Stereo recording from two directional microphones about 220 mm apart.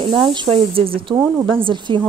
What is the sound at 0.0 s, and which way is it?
A woman's voice, 20° right (ahead or behind).